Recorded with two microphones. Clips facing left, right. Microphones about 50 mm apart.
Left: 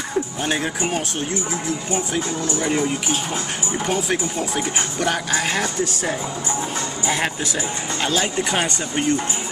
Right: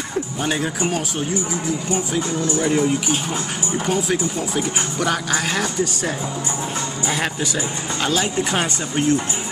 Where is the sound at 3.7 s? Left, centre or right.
Centre.